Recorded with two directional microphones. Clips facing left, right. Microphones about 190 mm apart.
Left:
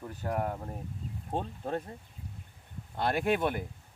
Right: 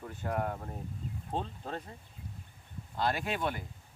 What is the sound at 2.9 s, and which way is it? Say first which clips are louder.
Speech: left 4 dB; 55° left (ahead or behind).